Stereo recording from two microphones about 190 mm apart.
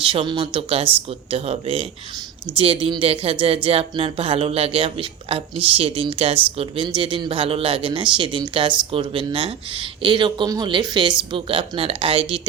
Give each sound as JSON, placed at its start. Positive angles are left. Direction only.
{"t": 0.0, "sound": "speech", "side_deg": -25}